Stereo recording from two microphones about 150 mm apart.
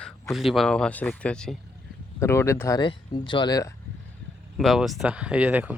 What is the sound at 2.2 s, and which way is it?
Speech, 15° left (ahead or behind).